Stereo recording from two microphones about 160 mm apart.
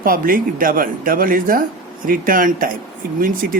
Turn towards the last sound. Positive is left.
turn(degrees=-65)  # may be behind; listen again after turning